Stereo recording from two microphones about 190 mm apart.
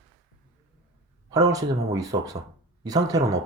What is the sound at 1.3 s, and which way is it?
Speech, 20° right (ahead or behind).